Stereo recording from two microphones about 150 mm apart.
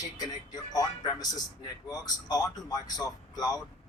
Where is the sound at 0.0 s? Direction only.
25° left (ahead or behind).